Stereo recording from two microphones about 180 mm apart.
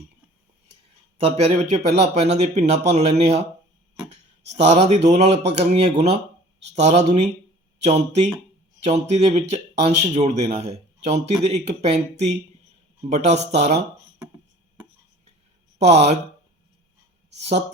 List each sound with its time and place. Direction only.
1.2 s speech: 35° right (ahead or behind)
4.6 s speech: 35° right (ahead or behind)
17.3 s speech: 35° right (ahead or behind)